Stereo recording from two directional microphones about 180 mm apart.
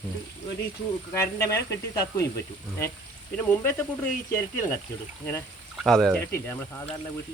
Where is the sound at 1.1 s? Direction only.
15° left (ahead or behind).